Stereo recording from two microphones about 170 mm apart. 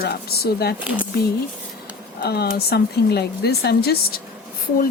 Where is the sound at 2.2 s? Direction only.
70° left (ahead or behind).